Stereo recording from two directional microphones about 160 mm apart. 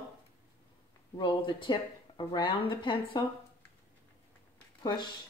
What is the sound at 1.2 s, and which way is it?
Speech, 30° left (ahead or behind).